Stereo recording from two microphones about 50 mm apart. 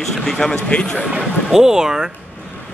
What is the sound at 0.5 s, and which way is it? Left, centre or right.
Speech, left.